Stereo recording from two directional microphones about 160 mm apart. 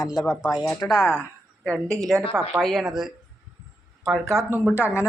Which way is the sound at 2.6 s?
Centre (ahead or behind).